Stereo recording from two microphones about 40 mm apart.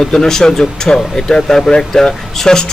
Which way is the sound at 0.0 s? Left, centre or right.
Centre.